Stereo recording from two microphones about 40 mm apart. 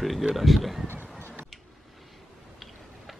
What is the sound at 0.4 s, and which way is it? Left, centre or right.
Speech, centre.